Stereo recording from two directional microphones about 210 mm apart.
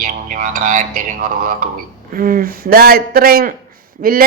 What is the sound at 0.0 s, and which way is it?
A woman's voice, 40° right (ahead or behind).